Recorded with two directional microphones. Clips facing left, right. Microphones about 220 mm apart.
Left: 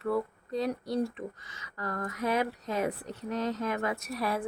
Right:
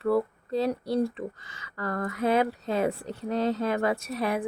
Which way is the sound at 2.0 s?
30° right (ahead or behind).